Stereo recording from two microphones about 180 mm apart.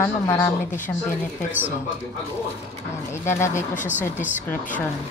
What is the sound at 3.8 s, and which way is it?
Speech, 10° right (ahead or behind).